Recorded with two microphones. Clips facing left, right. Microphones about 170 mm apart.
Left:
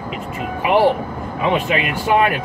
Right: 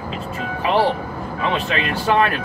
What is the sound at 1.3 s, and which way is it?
Speech, 15° left (ahead or behind).